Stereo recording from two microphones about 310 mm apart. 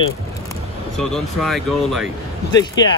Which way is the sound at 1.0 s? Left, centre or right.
Centre.